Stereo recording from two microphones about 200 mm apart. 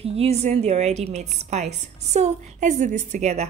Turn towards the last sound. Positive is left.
turn(degrees=-35)  # may be behind; listen again after turning